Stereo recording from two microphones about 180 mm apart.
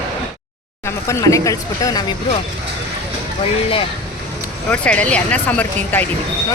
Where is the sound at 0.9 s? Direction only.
15° left (ahead or behind).